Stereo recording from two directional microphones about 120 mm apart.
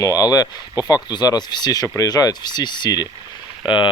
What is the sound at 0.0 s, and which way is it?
Speech, 30° left (ahead or behind).